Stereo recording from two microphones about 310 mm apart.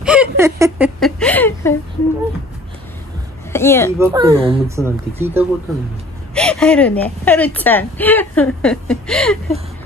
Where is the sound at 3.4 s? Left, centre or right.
Centre.